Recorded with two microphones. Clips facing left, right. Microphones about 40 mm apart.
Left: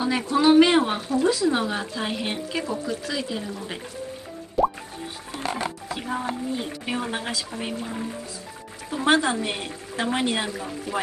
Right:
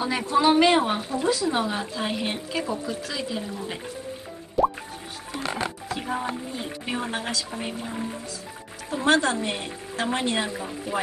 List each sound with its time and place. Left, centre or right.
0.0 s speech: centre
4.6 s music: centre
5.3 s music: right
5.9 s music: centre
6.5 s speech: centre
9.0 s speech: centre